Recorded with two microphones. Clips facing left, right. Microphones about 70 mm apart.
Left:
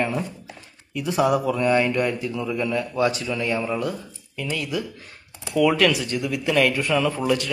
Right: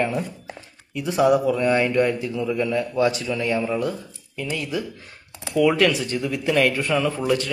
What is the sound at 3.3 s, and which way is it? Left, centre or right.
A man's voice, right.